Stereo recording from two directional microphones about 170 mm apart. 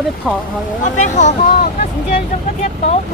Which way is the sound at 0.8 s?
45° left (ahead or behind).